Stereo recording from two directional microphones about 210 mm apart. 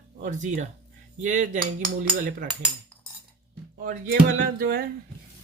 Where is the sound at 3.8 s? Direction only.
45° right (ahead or behind).